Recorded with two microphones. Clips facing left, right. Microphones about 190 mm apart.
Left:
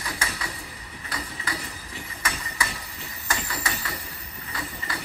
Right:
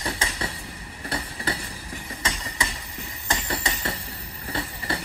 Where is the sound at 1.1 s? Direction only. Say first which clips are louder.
Right 4 dB; 30° right (ahead or behind).